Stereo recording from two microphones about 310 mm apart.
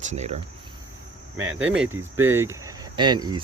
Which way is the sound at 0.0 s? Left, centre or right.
Right.